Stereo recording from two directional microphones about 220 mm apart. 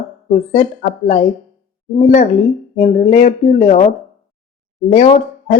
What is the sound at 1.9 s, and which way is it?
Speech, 35° left (ahead or behind).